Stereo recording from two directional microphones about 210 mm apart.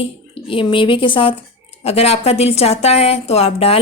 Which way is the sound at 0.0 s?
25° left (ahead or behind).